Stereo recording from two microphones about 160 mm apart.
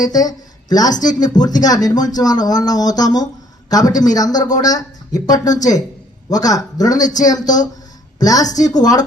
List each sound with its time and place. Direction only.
0.0 s speech: 25° left (ahead or behind)